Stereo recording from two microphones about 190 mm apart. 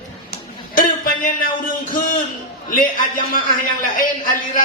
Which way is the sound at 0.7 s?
45° left (ahead or behind).